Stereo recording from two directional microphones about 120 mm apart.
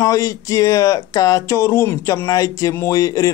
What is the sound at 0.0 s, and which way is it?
Speech, 25° left (ahead or behind).